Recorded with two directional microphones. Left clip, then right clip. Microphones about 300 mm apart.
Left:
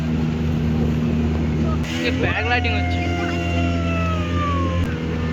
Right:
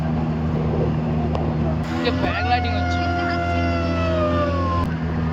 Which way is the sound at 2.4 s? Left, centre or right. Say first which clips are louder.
Even; centre.